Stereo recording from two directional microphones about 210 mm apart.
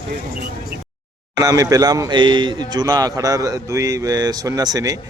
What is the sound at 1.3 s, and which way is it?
Speech, 20° right (ahead or behind).